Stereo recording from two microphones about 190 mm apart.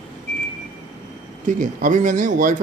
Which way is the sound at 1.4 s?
40° right (ahead or behind).